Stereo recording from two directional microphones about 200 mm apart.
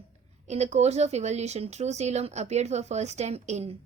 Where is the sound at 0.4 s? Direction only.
35° right (ahead or behind).